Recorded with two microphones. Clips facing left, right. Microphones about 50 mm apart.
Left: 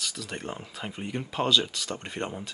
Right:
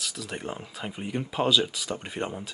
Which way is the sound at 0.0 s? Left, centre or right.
Centre.